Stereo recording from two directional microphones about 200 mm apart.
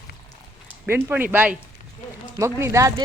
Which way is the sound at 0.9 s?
10° right (ahead or behind).